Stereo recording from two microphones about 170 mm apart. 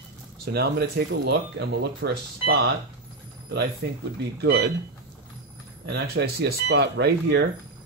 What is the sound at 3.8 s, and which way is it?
Speech, 90° right.